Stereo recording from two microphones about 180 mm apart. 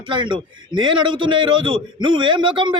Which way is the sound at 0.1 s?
25° right (ahead or behind).